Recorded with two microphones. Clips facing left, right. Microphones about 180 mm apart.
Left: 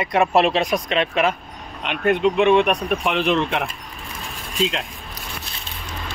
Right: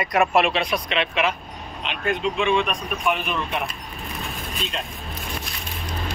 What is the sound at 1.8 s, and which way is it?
Speech, 60° left (ahead or behind).